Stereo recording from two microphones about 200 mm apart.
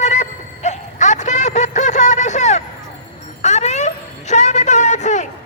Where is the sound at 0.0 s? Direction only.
35° left (ahead or behind).